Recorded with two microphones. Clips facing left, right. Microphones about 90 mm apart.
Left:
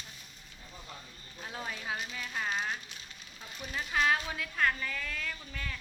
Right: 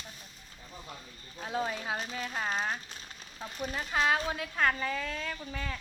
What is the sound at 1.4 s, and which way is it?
A woman's voice, 25° right (ahead or behind).